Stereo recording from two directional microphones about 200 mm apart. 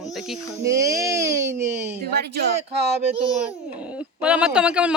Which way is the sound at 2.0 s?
55° right (ahead or behind).